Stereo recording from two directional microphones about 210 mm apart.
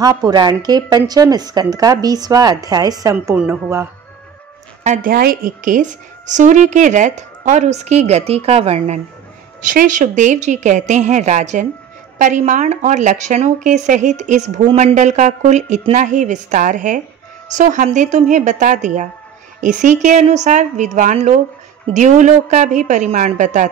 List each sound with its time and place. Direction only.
0.0 s a woman's voice: 20° right (ahead or behind)
4.8 s a woman's voice: 40° right (ahead or behind)